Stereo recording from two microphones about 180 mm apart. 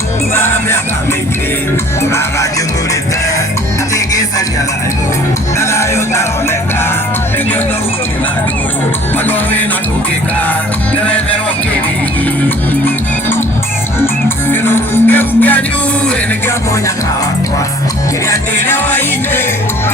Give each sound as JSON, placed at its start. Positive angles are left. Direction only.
{"t": 3.9, "sound": "music", "side_deg": 20}
{"t": 5.5, "sound": "music", "side_deg": 15}
{"t": 10.9, "sound": "music", "side_deg": 10}
{"t": 14.0, "sound": "music", "side_deg": 10}
{"t": 18.3, "sound": "music", "side_deg": 10}